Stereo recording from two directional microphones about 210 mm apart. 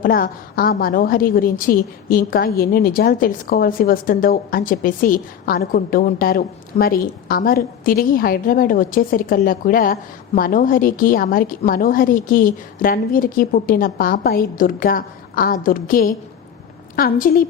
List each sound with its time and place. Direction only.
0.0 s a woman's voice: 45° left (ahead or behind)